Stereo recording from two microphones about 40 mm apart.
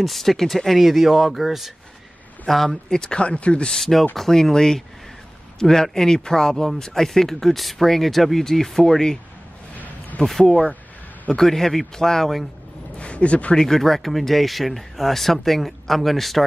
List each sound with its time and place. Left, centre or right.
0.0 s speech: centre
2.9 s speech: centre
3.7 s speech: centre
10.2 s speech: centre
12.9 s a sound: left
13.6 s speech: centre